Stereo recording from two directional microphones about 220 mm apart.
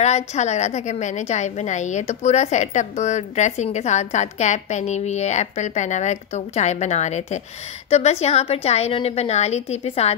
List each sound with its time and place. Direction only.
0.0 s a woman's voice: 30° left (ahead or behind)